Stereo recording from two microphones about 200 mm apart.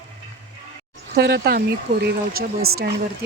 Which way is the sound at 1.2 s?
55° right (ahead or behind).